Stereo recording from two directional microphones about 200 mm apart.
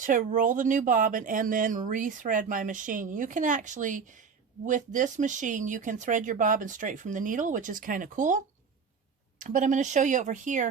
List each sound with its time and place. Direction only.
0.0 s speech: 40° right (ahead or behind)
9.4 s speech: 40° right (ahead or behind)